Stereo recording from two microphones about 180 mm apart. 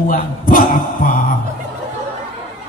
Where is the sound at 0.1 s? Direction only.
50° left (ahead or behind).